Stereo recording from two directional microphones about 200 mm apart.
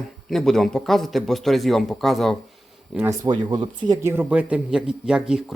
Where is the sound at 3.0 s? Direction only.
15° right (ahead or behind).